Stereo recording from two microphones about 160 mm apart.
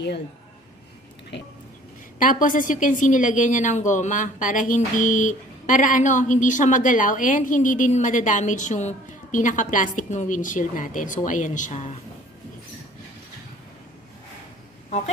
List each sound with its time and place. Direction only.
2.1 s a woman's voice: 60° left (ahead or behind)
14.8 s speech: 45° left (ahead or behind)